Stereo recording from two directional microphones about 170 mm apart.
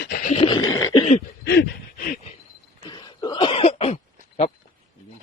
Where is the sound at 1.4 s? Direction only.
65° left (ahead or behind).